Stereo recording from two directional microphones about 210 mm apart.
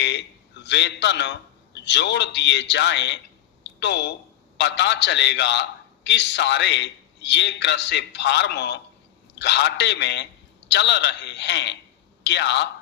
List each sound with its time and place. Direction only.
0.0 s a man's voice: 55° left (ahead or behind)
3.6 s a sound: 55° left (ahead or behind)
4.5 s a man's voice: 55° left (ahead or behind)